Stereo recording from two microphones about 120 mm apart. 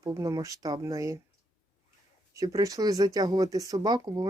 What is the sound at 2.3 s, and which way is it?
Speech, 25° right (ahead or behind).